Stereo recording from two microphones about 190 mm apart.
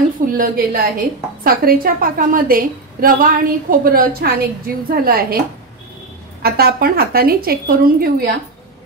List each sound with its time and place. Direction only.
0.4 s a woman's voice: 50° right (ahead or behind)
6.4 s a woman's voice: 55° right (ahead or behind)